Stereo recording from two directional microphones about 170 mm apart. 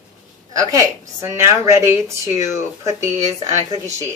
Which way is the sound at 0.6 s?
20° right (ahead or behind).